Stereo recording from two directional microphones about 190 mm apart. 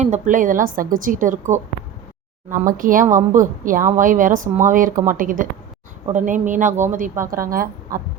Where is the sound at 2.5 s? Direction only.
45° right (ahead or behind).